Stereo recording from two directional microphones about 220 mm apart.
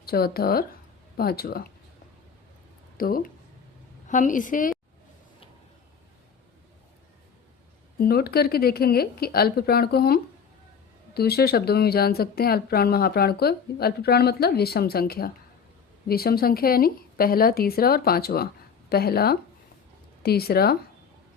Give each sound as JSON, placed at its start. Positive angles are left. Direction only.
{"t": 0.0, "sound": "speech", "side_deg": 45}
{"t": 3.0, "sound": "a woman's voice", "side_deg": 40}
{"t": 7.9, "sound": "speech", "side_deg": 45}